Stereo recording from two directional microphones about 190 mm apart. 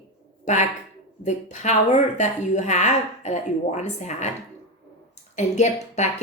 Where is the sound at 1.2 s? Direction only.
40° left (ahead or behind).